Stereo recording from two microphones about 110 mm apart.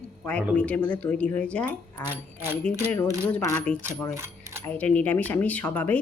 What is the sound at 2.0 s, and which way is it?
Speech, 20° right (ahead or behind).